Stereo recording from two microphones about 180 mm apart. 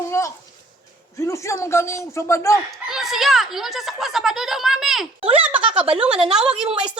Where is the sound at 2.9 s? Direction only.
Centre (ahead or behind).